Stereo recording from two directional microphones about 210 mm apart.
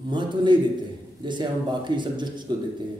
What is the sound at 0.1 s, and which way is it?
Speech, 20° right (ahead or behind).